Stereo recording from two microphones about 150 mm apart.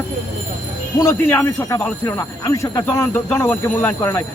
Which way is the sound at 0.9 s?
20° left (ahead or behind).